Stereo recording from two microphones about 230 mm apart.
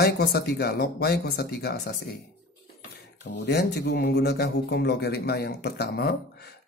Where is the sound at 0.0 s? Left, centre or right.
Left.